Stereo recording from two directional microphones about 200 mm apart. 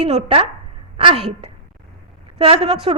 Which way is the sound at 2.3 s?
30° right (ahead or behind).